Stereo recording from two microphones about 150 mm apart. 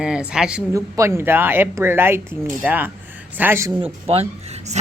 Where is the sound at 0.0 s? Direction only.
5° right (ahead or behind).